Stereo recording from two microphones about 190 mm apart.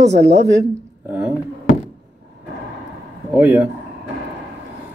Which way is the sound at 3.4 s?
10° right (ahead or behind).